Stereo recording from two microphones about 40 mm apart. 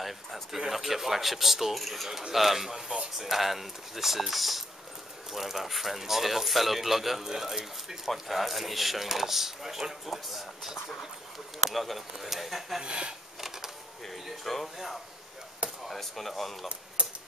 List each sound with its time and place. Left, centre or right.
0.0 s speech: centre
12.8 s speech: right
14.0 s speech: centre
16.6 s a sound: right